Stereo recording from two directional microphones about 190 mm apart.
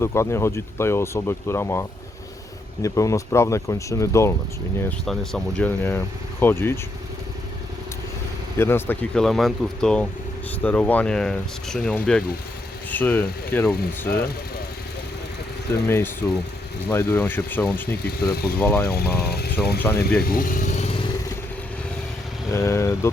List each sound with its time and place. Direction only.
0.0 s speech: 15° left (ahead or behind)
4.8 s speech: 5° left (ahead or behind)
8.5 s speech: 10° left (ahead or behind)
15.7 s speech: 15° left (ahead or behind)
18.2 s speech: 55° left (ahead or behind)
18.6 s speech: 10° left (ahead or behind)
18.9 s speech: 55° left (ahead or behind); by 20.9 s 40° left (ahead or behind)
22.5 s speech: 15° left (ahead or behind)